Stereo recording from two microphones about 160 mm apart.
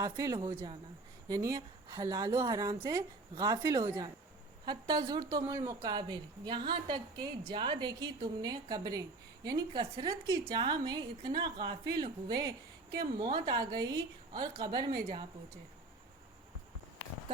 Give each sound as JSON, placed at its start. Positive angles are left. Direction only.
{"t": 0.0, "sound": "a woman's voice", "side_deg": -20}